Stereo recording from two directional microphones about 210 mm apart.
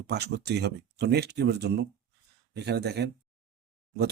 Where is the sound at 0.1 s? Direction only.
50° right (ahead or behind).